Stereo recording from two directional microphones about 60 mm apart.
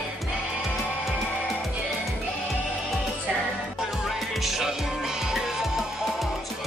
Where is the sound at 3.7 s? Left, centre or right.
Centre.